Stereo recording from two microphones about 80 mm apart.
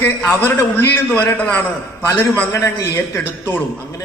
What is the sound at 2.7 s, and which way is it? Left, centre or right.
Speech, left.